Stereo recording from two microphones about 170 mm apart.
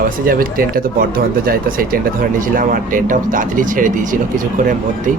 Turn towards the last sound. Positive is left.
turn(degrees=-50)  # may be behind; listen again after turning